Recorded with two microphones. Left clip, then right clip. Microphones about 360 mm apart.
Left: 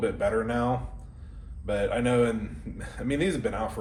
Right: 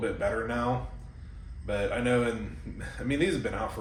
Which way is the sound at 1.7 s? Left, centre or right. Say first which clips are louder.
Left 2 dB; left.